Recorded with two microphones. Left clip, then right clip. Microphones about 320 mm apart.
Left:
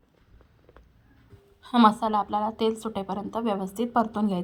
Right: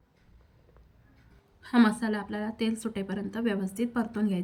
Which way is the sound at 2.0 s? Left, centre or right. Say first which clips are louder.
Left 8 dB; left.